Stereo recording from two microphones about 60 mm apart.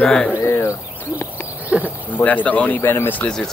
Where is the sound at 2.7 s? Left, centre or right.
Left.